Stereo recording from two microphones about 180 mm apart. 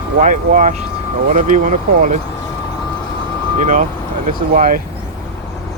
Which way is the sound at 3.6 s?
45° right (ahead or behind).